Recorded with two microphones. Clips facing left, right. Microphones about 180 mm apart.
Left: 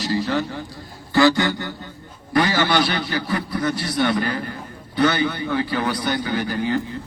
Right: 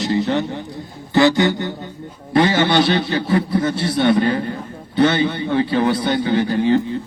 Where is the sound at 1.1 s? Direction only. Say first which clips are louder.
Right 3 dB; 20° right (ahead or behind).